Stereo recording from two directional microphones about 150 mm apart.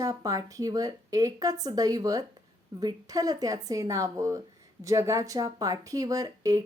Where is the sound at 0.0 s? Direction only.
25° right (ahead or behind).